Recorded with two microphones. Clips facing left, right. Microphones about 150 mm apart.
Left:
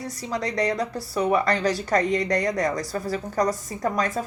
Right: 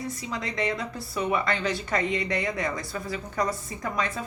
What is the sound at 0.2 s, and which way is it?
Speech, 40° left (ahead or behind).